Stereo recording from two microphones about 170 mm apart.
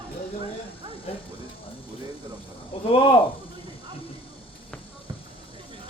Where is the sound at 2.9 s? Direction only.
30° left (ahead or behind).